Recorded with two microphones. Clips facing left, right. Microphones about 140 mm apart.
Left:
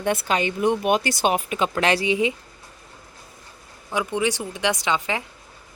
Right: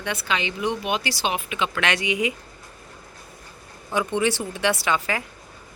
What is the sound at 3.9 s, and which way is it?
Speech, 10° left (ahead or behind).